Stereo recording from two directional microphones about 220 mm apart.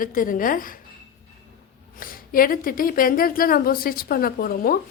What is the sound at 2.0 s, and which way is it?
A woman's voice, 40° left (ahead or behind).